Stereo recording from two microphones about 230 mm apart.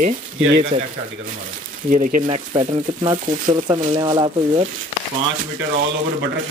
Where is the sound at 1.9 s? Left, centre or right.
Right.